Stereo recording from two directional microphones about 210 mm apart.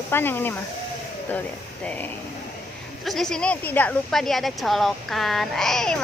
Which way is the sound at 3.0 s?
Centre (ahead or behind).